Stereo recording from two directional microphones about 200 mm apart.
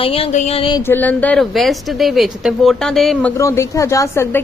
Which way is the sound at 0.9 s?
10° left (ahead or behind).